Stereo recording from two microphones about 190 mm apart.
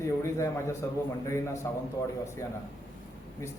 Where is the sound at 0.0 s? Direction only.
15° left (ahead or behind).